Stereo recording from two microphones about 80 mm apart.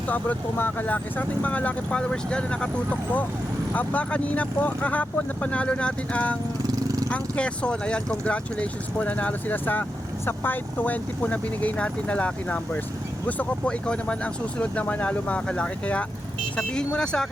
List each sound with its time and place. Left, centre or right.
0.1 s speech: left
6.7 s vehicle: right
7.1 s speech: centre